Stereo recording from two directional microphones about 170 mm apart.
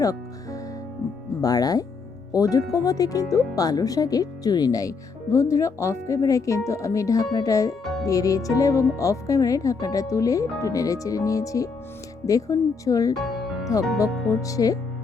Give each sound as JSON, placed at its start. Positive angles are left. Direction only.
{"t": 0.0, "sound": "music", "side_deg": 20}
{"t": 1.4, "sound": "speech", "side_deg": 20}
{"t": 13.1, "sound": "music", "side_deg": 0}
{"t": 14.0, "sound": "speech", "side_deg": 20}